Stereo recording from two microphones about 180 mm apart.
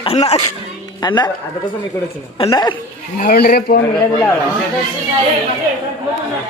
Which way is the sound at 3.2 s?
55° left (ahead or behind).